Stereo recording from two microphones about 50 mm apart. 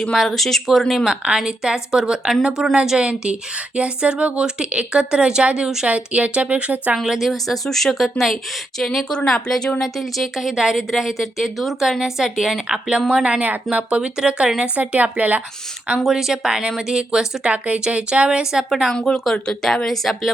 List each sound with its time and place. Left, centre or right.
0.1 s a woman's voice: centre
1.0 s a woman's voice: centre
6.9 s a woman's voice: centre
9.8 s a woman's voice: centre
13.4 s a woman's voice: right
14.8 s speech: right
16.0 s a woman's voice: centre
18.7 s a woman's voice: centre
18.9 s speech: centre